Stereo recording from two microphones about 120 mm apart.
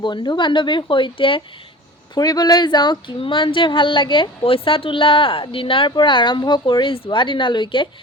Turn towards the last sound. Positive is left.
turn(degrees=40)  # may be behind; listen again after turning